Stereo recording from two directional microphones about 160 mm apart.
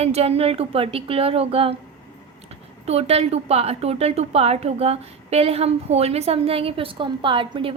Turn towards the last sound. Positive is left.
turn(degrees=-35)  # may be behind; listen again after turning